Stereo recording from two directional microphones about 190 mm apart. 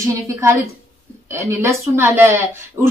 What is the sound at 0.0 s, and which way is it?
Speech, 15° right (ahead or behind).